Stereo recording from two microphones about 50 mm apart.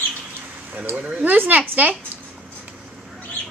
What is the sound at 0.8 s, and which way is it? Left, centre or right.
Speech, right.